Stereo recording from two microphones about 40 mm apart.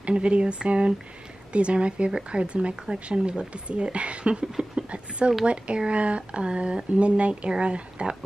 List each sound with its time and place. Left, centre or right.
0.0 s speech: right